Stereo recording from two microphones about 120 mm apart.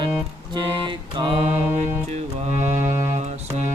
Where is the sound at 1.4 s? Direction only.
65° right (ahead or behind).